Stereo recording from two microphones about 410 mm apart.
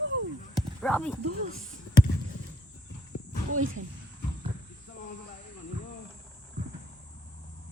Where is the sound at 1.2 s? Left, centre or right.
Right.